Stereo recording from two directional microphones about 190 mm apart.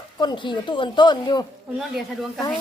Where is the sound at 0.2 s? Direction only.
25° left (ahead or behind).